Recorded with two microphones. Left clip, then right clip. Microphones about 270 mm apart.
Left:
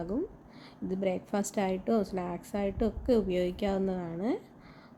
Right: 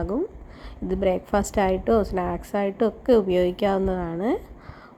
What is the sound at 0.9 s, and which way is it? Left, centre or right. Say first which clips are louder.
A woman's voice: right 9 dB; centre.